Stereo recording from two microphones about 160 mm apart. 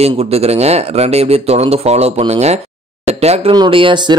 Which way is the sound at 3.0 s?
40° right (ahead or behind).